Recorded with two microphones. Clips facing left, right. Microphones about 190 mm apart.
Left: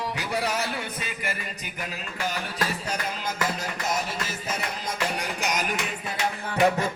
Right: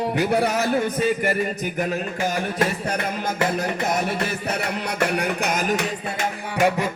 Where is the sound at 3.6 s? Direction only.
55° right (ahead or behind).